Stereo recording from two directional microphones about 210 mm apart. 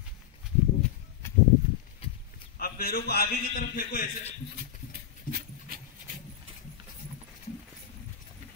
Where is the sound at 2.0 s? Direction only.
25° left (ahead or behind).